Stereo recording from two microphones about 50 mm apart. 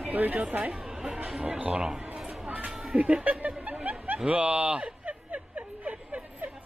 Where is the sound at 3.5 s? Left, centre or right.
Right.